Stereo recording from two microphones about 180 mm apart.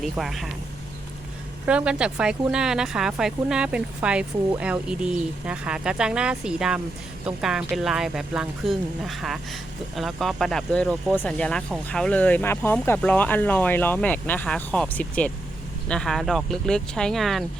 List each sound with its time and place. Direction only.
0.0 s speech: centre (ahead or behind)
1.6 s speech: 5° right (ahead or behind)